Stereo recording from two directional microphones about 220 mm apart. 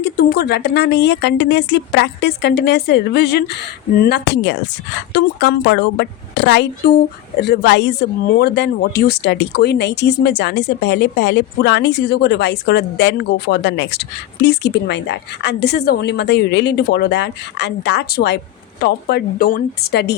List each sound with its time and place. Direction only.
0.0 s speech: 45° left (ahead or behind)